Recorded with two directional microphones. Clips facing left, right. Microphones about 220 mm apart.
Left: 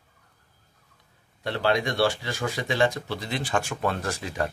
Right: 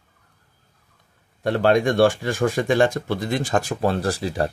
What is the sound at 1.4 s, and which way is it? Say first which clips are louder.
Speech: right 7 dB; 50° right (ahead or behind).